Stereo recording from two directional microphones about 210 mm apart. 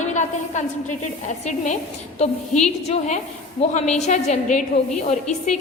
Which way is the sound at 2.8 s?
35° left (ahead or behind).